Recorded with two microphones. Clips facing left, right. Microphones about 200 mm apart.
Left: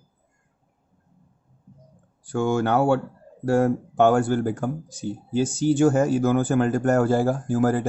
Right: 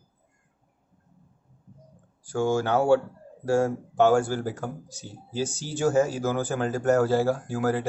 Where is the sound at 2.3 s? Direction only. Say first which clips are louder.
Left 2 dB; 60° left (ahead or behind).